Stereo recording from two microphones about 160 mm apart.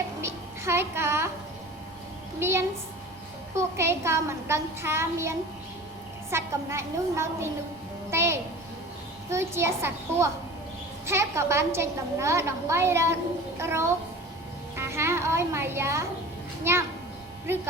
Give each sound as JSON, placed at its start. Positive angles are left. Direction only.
{"t": 0.2, "sound": "music", "side_deg": -15}
{"t": 2.4, "sound": "a woman's voice", "side_deg": -15}
{"t": 6.3, "sound": "a woman's voice", "side_deg": -15}
{"t": 14.8, "sound": "a sound", "side_deg": -15}
{"t": 16.7, "sound": "a woman's voice", "side_deg": -15}